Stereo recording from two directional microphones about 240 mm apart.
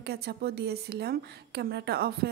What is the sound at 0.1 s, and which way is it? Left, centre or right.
A woman's voice, right.